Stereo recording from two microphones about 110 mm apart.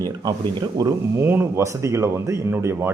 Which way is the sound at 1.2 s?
20° right (ahead or behind).